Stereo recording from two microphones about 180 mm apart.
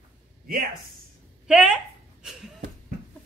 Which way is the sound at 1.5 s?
5° right (ahead or behind).